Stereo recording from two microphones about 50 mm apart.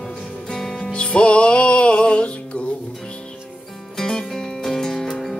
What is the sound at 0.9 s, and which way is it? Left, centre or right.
Music, left.